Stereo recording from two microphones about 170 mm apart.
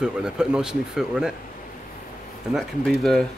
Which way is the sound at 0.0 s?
5° right (ahead or behind).